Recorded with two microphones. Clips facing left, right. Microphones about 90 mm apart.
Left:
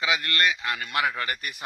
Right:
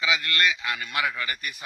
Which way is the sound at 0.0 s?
45° left (ahead or behind).